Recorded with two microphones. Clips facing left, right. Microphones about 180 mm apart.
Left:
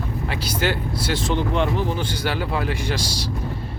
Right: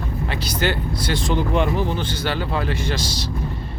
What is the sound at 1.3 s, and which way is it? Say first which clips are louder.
Speech: right 3 dB; 10° right (ahead or behind).